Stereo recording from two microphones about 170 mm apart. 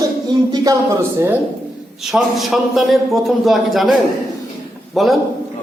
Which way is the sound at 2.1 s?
Centre (ahead or behind).